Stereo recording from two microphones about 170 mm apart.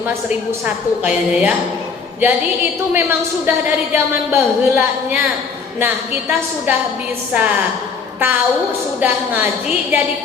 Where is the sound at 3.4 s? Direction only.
10° right (ahead or behind).